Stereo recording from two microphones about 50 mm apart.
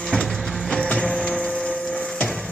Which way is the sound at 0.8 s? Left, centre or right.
Centre.